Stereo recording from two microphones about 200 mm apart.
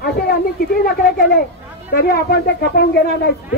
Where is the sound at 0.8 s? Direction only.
50° left (ahead or behind).